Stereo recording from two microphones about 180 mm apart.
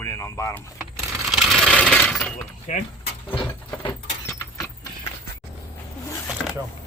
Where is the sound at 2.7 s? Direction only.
40° left (ahead or behind).